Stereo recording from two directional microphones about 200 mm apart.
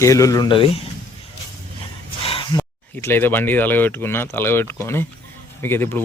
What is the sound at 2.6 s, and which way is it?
Speech, 10° left (ahead or behind).